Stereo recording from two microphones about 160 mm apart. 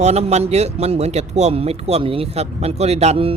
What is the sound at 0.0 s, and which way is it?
A man's voice, 40° right (ahead or behind).